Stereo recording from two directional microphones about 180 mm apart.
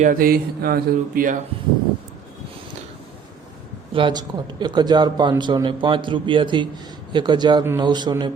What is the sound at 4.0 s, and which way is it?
Speech, 25° right (ahead or behind).